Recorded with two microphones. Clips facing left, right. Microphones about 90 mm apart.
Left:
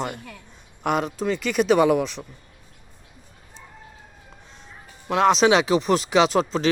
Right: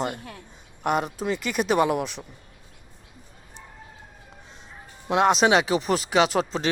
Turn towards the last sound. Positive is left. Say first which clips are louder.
# left 3 dB
turn(degrees=-5)  # may be behind; listen again after turning